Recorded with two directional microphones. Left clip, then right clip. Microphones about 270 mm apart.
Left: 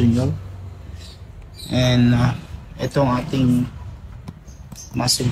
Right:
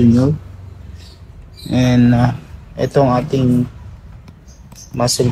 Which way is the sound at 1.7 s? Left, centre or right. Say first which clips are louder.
Right 4 dB; centre.